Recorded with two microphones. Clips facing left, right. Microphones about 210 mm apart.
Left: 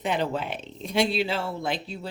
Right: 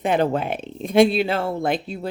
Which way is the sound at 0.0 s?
55° right (ahead or behind).